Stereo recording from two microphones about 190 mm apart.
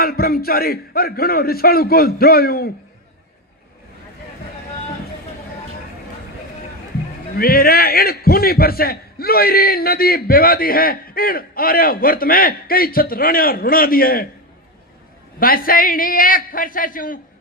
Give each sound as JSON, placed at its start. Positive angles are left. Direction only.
{"t": 0.0, "sound": "a man's voice", "side_deg": 55}
{"t": 7.3, "sound": "a man's voice", "side_deg": 55}
{"t": 15.4, "sound": "a man's voice", "side_deg": 50}